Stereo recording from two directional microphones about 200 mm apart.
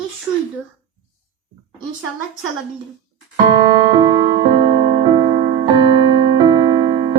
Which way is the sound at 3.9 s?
20° right (ahead or behind).